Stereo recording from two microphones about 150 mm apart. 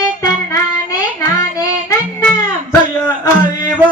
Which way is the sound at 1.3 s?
25° left (ahead or behind).